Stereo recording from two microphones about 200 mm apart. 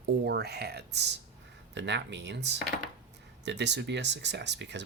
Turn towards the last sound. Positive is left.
turn(degrees=-60)  # may be behind; listen again after turning